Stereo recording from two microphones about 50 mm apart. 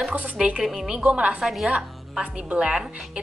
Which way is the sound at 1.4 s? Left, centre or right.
Centre.